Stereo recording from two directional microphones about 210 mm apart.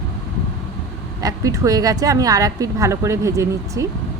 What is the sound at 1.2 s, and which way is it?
A woman's voice, 15° right (ahead or behind).